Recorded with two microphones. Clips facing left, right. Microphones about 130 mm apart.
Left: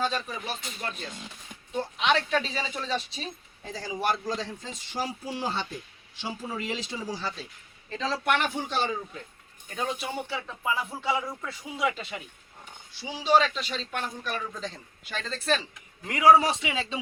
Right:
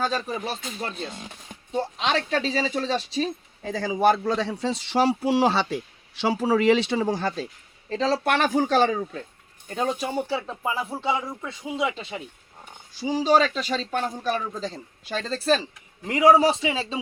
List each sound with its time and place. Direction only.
0.0 s speech: 40° right (ahead or behind)
4.2 s a man's voice: 65° right (ahead or behind)
7.9 s speech: 35° right (ahead or behind)
8.5 s a man's voice: 90° right; by 9.2 s 60° right (ahead or behind)
9.6 s speech: 40° right (ahead or behind)
12.9 s speech: 45° right (ahead or behind)